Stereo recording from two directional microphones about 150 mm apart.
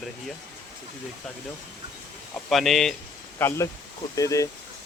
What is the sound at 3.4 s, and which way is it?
Speech, 20° left (ahead or behind).